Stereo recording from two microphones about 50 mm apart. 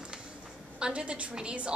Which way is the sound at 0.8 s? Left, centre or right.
Right.